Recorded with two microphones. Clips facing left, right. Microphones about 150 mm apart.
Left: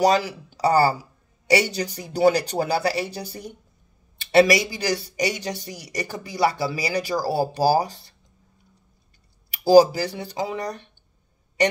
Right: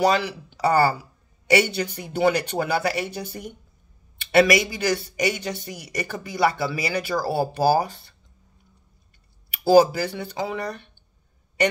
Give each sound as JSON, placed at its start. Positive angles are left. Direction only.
{"t": 0.0, "sound": "speech", "side_deg": 40}
{"t": 9.7, "sound": "speech", "side_deg": 35}